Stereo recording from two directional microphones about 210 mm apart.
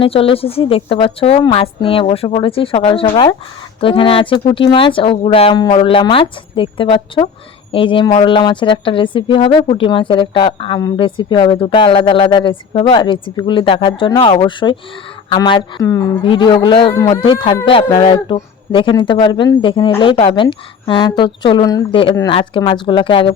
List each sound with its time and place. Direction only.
0.0 s a woman's voice: 25° left (ahead or behind)